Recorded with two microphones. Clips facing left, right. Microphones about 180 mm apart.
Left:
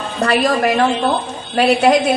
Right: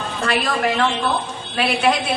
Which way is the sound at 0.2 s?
40° left (ahead or behind).